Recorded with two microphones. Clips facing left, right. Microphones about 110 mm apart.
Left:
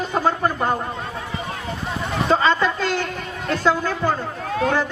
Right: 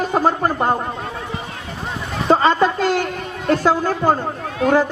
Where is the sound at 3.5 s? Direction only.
50° right (ahead or behind).